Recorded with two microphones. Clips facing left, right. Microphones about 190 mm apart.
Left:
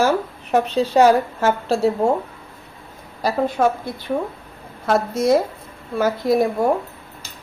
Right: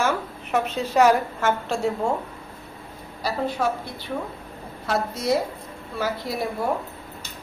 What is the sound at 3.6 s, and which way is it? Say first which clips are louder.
Speech: left 7 dB; 50° left (ahead or behind).